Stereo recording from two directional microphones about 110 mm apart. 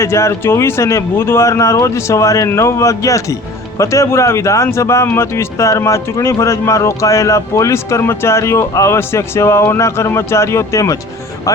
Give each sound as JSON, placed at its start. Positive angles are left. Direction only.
{"t": 0.0, "sound": "speech", "side_deg": 25}